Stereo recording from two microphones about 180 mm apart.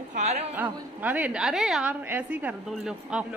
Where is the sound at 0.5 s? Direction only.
10° right (ahead or behind).